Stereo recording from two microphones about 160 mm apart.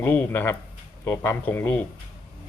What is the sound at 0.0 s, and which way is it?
A man's voice, 10° left (ahead or behind).